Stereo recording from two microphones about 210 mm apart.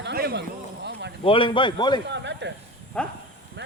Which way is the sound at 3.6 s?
55° right (ahead or behind).